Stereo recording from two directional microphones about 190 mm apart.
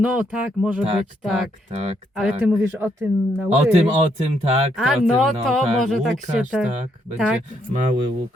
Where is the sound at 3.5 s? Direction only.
35° right (ahead or behind).